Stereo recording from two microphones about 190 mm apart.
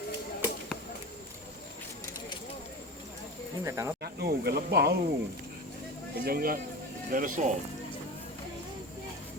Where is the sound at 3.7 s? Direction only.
15° right (ahead or behind).